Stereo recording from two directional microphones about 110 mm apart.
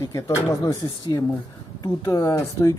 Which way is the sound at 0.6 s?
40° left (ahead or behind).